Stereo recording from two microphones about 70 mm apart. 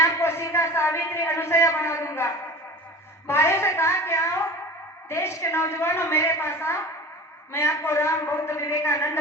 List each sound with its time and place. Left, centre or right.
0.0 s a woman's voice: left